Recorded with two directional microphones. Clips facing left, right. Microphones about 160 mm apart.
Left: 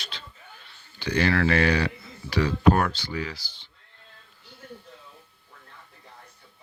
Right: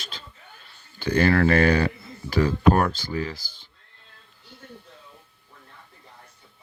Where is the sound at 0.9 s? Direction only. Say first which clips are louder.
Right 4 dB; 50° right (ahead or behind).